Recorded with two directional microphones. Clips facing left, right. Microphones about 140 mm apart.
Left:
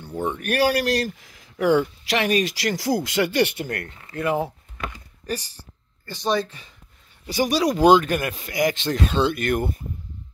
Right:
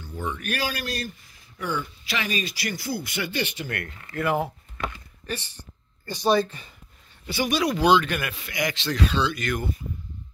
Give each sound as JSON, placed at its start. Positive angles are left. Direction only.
{"t": 0.0, "sound": "speech", "side_deg": 55}
{"t": 3.6, "sound": "speech", "side_deg": 40}
{"t": 4.0, "sound": "speech", "side_deg": 25}
{"t": 5.2, "sound": "speech", "side_deg": 40}
{"t": 6.0, "sound": "speech", "side_deg": -10}
{"t": 6.3, "sound": "speech", "side_deg": 0}
{"t": 7.2, "sound": "speech", "side_deg": 40}